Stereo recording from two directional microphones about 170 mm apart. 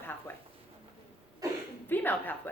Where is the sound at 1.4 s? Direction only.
20° right (ahead or behind).